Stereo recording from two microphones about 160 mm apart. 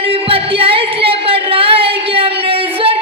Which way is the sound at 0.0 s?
35° right (ahead or behind).